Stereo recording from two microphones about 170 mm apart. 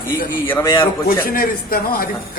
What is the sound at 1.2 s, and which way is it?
Speech, 60° left (ahead or behind).